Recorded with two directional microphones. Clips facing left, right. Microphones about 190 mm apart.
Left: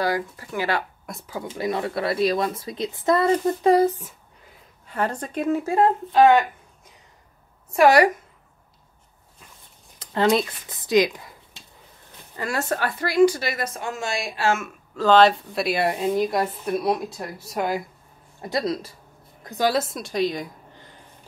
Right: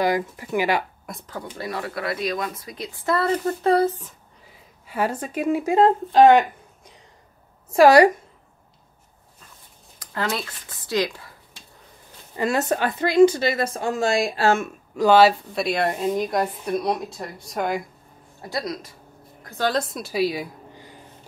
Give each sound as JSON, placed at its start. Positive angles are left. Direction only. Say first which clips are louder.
{"t": 0.0, "sound": "speech", "louder": "right 2 dB", "side_deg": -20}
{"t": 1.0, "sound": "speech", "louder": "left 1 dB", "side_deg": 5}
{"t": 1.5, "sound": "speech", "louder": "left 5 dB", "side_deg": 20}
{"t": 4.8, "sound": "speech", "louder": "right 1 dB", "side_deg": -5}
{"t": 7.7, "sound": "a woman's voice", "louder": "right 3 dB", "side_deg": -30}
{"t": 9.9, "sound": "speech", "louder": "left 7 dB", "side_deg": 20}
{"t": 12.4, "sound": "a woman's voice", "louder": "right 4 dB", "side_deg": -20}
{"t": 15.0, "sound": "a woman's voice", "louder": "right 1 dB", "side_deg": -10}
{"t": 18.4, "sound": "speech", "louder": "left 4 dB", "side_deg": 25}
{"t": 19.4, "sound": "a woman's voice", "louder": "left 2 dB", "side_deg": 15}